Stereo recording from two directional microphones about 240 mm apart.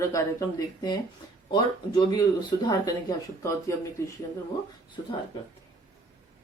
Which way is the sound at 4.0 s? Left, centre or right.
Centre.